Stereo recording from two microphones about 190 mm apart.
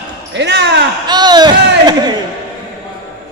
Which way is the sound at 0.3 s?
65° right (ahead or behind).